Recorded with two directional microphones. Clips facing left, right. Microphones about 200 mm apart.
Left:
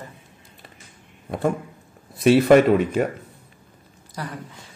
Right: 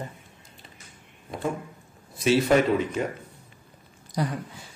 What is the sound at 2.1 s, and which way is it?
Speech, 60° left (ahead or behind).